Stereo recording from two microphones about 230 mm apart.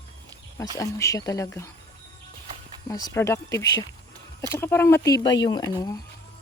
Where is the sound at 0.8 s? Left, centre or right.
Centre.